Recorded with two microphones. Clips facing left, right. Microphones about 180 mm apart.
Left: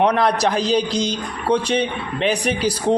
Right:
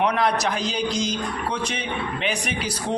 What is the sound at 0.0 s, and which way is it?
A man's voice, 35° left (ahead or behind).